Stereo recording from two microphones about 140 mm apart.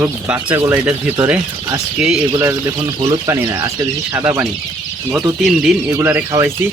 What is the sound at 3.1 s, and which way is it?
Speech, 20° right (ahead or behind).